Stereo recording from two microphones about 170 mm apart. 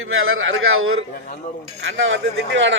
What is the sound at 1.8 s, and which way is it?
Speech, 90° right.